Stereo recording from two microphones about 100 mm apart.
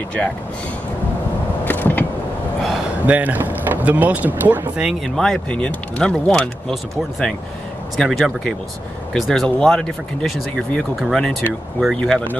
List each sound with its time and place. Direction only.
1.6 s a sound: 20° left (ahead or behind)
3.1 s speech: 15° right (ahead or behind)
5.0 s speech: 5° left (ahead or behind)